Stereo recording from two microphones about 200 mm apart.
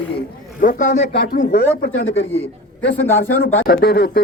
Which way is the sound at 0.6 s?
40° left (ahead or behind).